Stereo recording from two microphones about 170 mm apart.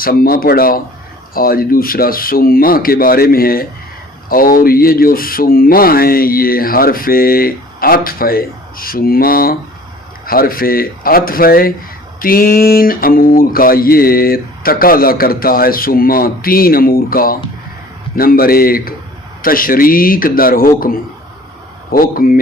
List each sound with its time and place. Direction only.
0.0 s speech: 60° left (ahead or behind)